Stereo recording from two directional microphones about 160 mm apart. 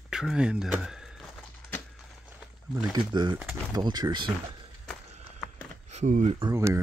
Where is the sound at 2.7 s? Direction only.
25° right (ahead or behind).